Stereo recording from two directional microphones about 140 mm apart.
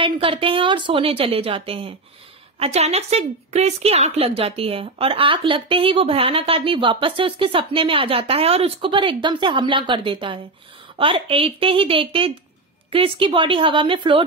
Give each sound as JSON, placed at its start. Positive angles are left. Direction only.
{"t": 0.0, "sound": "a woman's voice", "side_deg": -40}